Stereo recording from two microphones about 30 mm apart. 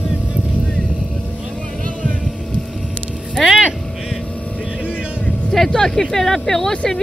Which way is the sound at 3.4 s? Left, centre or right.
Centre.